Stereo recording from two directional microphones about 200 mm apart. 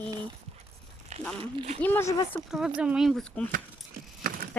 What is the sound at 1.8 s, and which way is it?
Speech, 10° left (ahead or behind).